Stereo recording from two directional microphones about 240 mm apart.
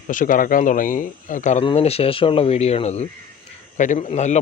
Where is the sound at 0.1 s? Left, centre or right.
Left.